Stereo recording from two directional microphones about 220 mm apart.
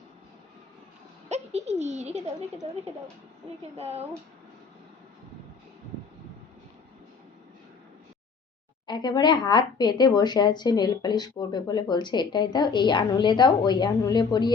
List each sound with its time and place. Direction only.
1.3 s a child's voice: 30° right (ahead or behind)
3.8 s speech: 30° right (ahead or behind)
8.9 s speech: 20° left (ahead or behind)